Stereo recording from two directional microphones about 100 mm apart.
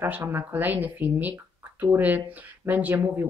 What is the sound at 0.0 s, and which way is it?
Speech, 20° right (ahead or behind).